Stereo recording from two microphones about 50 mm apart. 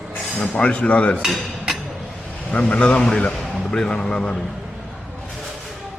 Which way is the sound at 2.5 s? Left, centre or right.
Left.